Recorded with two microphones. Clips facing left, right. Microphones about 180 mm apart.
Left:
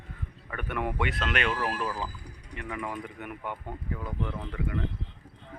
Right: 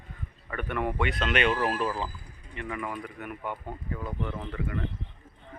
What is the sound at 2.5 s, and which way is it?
Speech, 10° left (ahead or behind).